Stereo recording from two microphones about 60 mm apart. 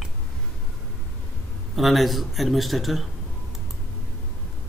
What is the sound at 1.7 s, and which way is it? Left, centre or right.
Speech, centre.